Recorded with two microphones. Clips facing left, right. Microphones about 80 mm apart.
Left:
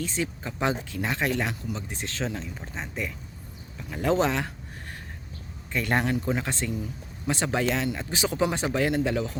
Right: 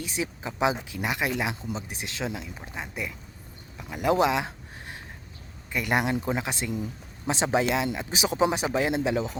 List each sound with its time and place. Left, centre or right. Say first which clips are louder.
0.0 s speech: left 1 dB; centre
5.7 s speech: even; centre